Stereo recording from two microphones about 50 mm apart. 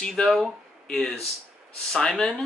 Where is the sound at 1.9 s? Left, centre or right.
Centre.